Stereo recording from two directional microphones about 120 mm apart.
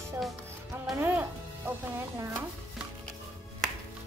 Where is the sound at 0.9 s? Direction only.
15° right (ahead or behind).